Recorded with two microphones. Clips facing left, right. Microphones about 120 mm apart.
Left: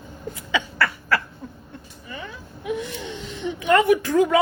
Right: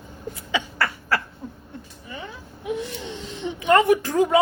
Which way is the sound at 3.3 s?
30° right (ahead or behind).